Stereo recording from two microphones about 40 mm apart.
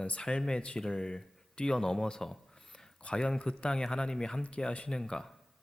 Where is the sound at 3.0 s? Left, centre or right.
Left.